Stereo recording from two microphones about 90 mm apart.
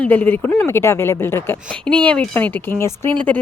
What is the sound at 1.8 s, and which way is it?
Speech, 15° left (ahead or behind).